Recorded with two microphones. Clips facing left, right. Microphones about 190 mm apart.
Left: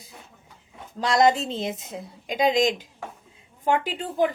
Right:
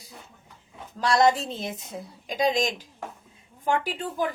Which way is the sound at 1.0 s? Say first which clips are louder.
Left 1 dB; 20° left (ahead or behind).